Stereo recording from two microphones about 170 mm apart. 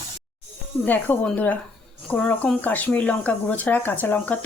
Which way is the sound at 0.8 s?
10° left (ahead or behind).